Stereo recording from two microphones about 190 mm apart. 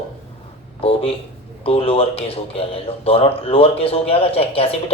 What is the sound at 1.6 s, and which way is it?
Speech, 30° left (ahead or behind).